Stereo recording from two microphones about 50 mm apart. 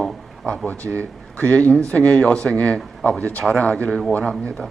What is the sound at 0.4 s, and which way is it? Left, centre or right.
Speech, left.